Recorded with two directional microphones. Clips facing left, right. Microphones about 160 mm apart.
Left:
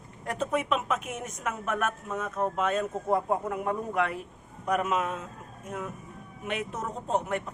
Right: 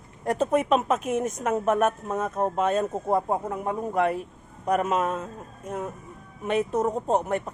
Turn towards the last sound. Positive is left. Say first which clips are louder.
# right 5 dB
turn(degrees=-40)  # may be behind; listen again after turning